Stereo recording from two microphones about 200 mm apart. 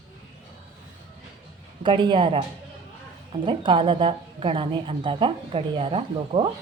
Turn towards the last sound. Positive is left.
turn(degrees=-25)  # may be behind; listen again after turning